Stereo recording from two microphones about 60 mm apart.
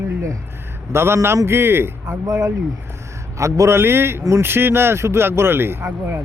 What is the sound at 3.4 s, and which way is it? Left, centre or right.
Speech, right.